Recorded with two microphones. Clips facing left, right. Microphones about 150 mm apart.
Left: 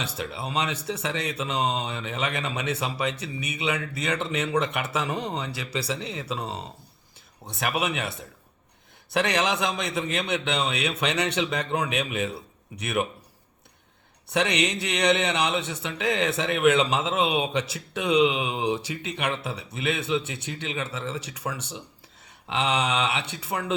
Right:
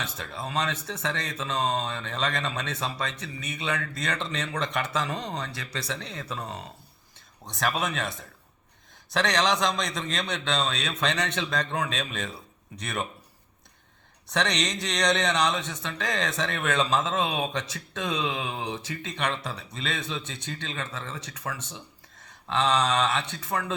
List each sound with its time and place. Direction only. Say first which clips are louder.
0.4 s speech: left 1 dB; 10° left (ahead or behind)
7.8 s speech: left 2 dB; 10° left (ahead or behind)
9.1 s speech: even; 10° left (ahead or behind)
14.3 s speech: left 3 dB; 10° left (ahead or behind)